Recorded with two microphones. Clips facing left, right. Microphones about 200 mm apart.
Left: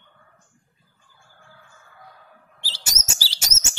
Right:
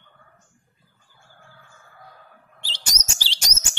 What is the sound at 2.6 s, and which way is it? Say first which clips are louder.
Chirp: right 1 dB; 5° left (ahead or behind).